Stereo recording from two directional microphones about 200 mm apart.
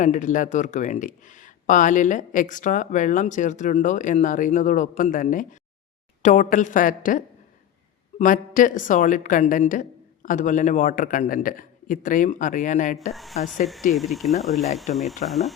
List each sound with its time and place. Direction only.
0.0 s speech: 40° left (ahead or behind)
13.1 s speech: centre (ahead or behind)